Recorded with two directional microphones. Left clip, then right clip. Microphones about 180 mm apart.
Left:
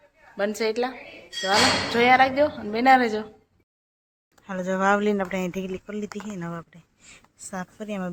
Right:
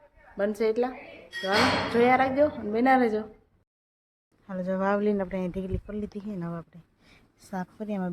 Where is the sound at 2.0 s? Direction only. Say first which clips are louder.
Left 4 dB; 10° right (ahead or behind).